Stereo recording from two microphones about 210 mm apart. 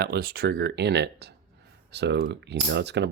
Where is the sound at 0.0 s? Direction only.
50° right (ahead or behind).